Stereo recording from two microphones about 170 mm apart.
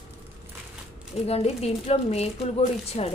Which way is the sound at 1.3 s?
35° left (ahead or behind).